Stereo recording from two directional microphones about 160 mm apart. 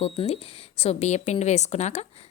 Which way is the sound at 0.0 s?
40° left (ahead or behind).